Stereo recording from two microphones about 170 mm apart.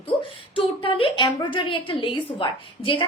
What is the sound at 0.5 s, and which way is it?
A woman's voice, 30° left (ahead or behind).